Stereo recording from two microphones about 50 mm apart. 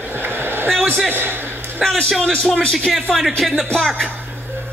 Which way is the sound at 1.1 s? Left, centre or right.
Right.